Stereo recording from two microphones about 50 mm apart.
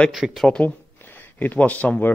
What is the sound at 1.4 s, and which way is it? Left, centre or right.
Speech, left.